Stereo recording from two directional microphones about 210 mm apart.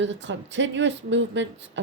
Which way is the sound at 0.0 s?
60° right (ahead or behind).